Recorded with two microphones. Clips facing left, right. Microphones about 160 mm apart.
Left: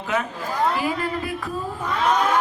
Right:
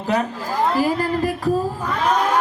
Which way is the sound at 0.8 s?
35° right (ahead or behind).